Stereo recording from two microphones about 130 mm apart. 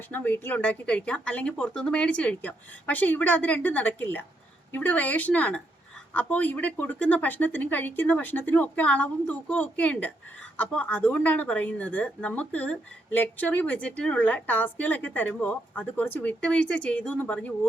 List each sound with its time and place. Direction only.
0.1 s speech: 15° left (ahead or behind)